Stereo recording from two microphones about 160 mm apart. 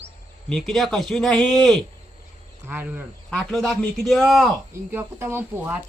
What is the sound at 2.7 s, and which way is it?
Speech, 15° right (ahead or behind).